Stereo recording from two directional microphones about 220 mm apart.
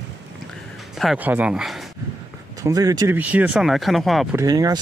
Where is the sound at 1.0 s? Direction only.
5° right (ahead or behind).